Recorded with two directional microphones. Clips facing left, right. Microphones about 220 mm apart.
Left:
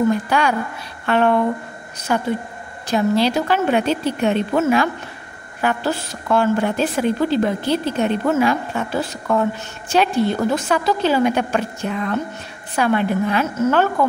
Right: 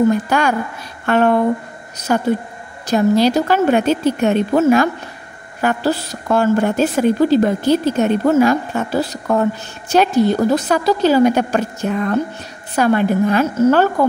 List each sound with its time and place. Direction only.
0.1 s a woman's voice: 45° right (ahead or behind)